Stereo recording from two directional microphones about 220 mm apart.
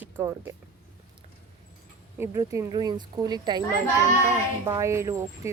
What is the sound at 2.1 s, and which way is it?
Speech, 10° right (ahead or behind).